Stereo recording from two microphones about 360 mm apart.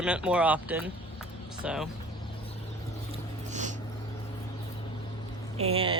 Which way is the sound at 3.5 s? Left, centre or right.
Centre.